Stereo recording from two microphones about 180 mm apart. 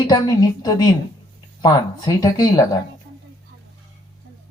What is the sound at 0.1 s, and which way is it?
Speech, 20° left (ahead or behind).